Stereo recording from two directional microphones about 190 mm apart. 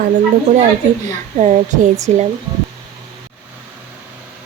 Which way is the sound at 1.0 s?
35° right (ahead or behind).